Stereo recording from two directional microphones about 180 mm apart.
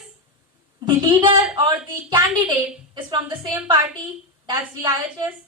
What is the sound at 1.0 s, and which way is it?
A woman's voice, 25° right (ahead or behind).